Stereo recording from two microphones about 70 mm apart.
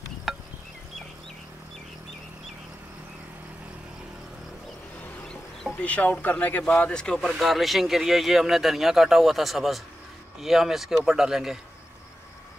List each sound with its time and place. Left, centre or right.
0.3 s a sound: centre
5.3 s chicken: centre
5.8 s speech: centre
7.2 s speech: centre